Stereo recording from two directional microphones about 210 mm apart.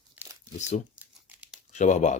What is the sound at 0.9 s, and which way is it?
Crumpling, 5° right (ahead or behind).